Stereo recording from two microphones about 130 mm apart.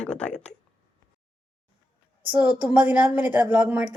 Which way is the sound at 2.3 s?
10° right (ahead or behind).